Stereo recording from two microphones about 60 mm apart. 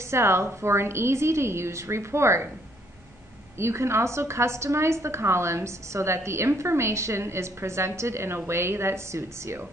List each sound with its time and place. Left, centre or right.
0.1 s a woman's voice: right
3.5 s a woman's voice: right